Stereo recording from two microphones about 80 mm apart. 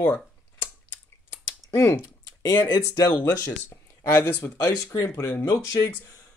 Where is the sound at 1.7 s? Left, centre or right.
Left.